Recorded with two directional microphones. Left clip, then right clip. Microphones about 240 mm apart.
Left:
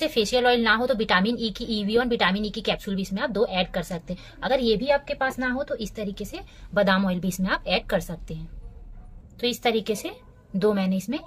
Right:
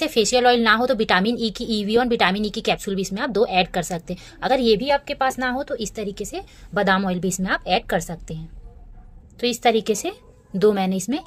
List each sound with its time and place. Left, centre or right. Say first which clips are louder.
0.0 s a woman's voice: right 4 dB; right
9.4 s a woman's voice: right 5 dB; right